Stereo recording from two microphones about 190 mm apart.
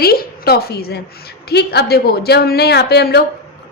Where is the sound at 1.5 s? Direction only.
60° left (ahead or behind).